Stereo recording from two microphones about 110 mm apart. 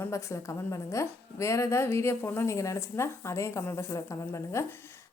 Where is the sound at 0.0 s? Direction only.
25° left (ahead or behind).